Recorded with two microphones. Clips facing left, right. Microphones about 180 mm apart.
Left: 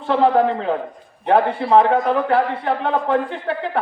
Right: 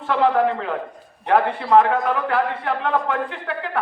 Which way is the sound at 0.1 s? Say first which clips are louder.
Left 3 dB; 30° left (ahead or behind).